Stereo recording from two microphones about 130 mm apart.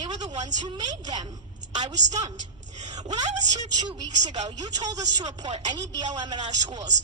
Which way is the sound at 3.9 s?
35° right (ahead or behind).